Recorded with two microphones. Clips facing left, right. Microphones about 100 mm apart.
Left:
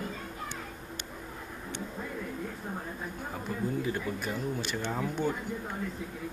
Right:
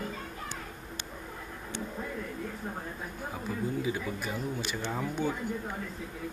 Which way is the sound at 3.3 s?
5° right (ahead or behind).